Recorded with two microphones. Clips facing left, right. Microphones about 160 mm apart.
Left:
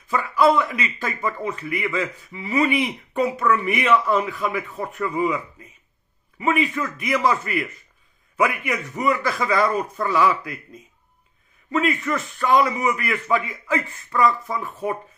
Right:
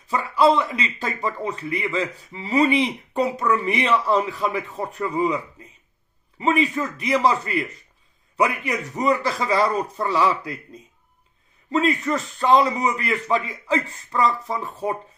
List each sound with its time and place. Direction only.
0.1 s a man's voice: 30° right (ahead or behind)
11.7 s a man's voice: 30° right (ahead or behind)